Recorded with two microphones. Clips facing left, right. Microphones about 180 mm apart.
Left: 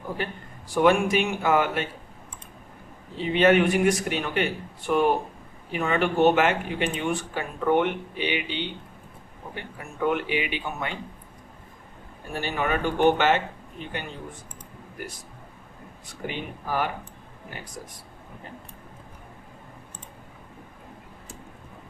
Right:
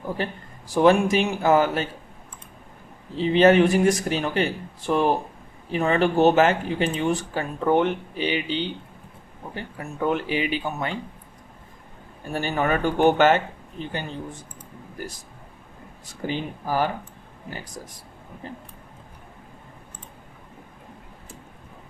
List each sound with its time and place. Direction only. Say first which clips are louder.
0.7 s speech: right 3 dB; 35° right (ahead or behind)
3.2 s speech: right 3 dB; 30° right (ahead or behind)
10.1 s speech: right 2 dB; 35° right (ahead or behind)
12.4 s speech: right 3 dB; 40° right (ahead or behind)
16.2 s speech: right 4 dB; 35° right (ahead or behind)